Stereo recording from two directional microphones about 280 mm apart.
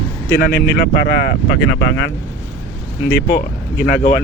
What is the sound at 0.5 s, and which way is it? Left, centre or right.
Speech, left.